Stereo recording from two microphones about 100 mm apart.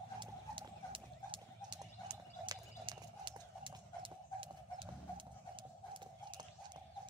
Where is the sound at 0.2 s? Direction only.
55° right (ahead or behind).